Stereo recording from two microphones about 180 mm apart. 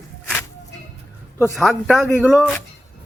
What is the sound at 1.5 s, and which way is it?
A man's voice, centre (ahead or behind).